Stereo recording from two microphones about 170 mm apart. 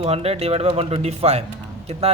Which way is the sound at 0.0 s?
35° right (ahead or behind).